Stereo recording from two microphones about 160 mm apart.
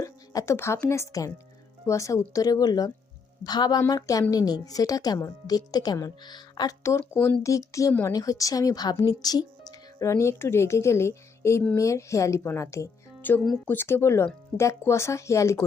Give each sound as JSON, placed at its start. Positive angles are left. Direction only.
{"t": 0.0, "sound": "a woman's voice", "side_deg": 20}